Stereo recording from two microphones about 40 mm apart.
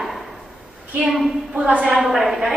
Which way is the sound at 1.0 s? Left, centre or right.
Centre.